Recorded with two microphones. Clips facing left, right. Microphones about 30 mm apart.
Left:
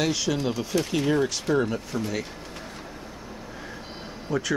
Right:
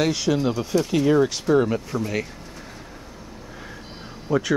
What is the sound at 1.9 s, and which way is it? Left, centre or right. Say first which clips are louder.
Speech: right 3 dB; centre.